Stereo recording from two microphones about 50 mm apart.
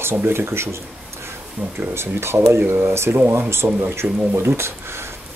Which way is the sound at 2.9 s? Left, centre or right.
Right.